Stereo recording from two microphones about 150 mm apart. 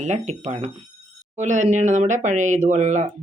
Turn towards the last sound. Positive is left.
turn(degrees=-55)  # may be behind; listen again after turning